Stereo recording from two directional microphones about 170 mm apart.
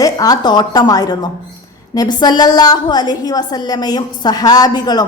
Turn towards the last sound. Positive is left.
turn(degrees=25)  # may be behind; listen again after turning